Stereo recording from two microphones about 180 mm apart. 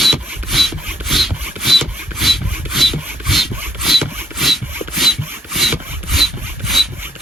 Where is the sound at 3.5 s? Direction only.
10° right (ahead or behind).